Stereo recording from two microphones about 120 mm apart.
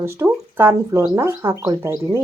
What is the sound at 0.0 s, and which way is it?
Speech, 20° right (ahead or behind).